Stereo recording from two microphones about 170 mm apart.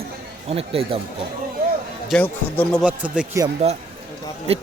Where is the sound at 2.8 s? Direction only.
5° right (ahead or behind).